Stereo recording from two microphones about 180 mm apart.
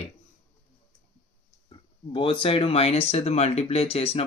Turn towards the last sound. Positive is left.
turn(degrees=35)  # may be behind; listen again after turning